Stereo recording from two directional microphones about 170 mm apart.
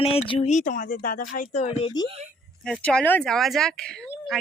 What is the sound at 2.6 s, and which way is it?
Speech, 5° left (ahead or behind).